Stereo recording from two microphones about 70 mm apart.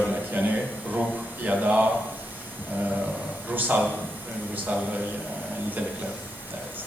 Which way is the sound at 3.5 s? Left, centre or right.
Right.